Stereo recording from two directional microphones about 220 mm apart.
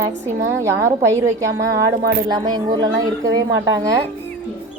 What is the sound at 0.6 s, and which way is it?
A woman's voice, 15° right (ahead or behind).